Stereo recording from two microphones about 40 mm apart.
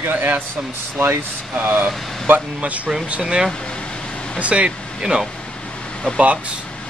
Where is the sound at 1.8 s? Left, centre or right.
Right.